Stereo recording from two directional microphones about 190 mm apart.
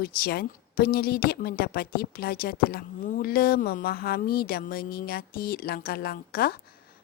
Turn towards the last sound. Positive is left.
turn(degrees=50)  # may be behind; listen again after turning